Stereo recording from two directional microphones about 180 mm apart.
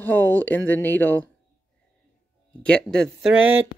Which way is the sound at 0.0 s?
10° left (ahead or behind).